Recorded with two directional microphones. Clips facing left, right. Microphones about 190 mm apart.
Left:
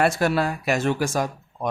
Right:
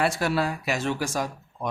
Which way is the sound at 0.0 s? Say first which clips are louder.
Left 4 dB; 50° left (ahead or behind).